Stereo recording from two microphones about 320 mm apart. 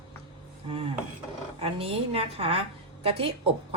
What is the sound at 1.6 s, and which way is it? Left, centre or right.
A woman's voice, centre.